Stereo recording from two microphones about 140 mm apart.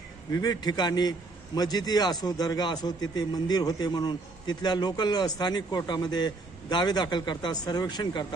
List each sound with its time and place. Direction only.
0.3 s a man's voice: 25° left (ahead or behind)